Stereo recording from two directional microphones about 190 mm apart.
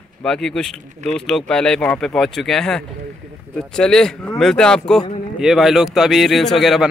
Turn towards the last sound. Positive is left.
turn(degrees=0)  # may be behind; listen again after turning